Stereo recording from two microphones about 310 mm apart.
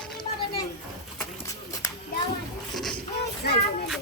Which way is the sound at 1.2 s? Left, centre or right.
Centre.